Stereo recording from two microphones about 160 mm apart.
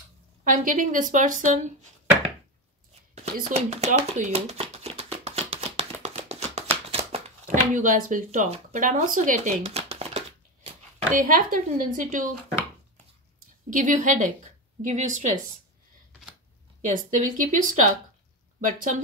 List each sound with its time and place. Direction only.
0.4 s speech: 55° right (ahead or behind)
3.5 s a sound: 45° right (ahead or behind)
7.4 s speech: 55° right (ahead or behind)
13.7 s a woman's voice: 55° right (ahead or behind)
16.8 s speech: 55° right (ahead or behind)